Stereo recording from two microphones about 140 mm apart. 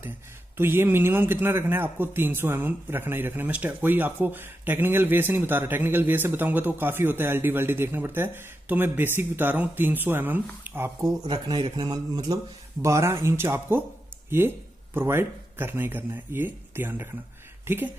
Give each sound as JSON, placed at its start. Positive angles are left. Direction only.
{"t": 0.6, "sound": "speech", "side_deg": -15}
{"t": 11.2, "sound": "speech", "side_deg": -30}
{"t": 15.0, "sound": "speech", "side_deg": -15}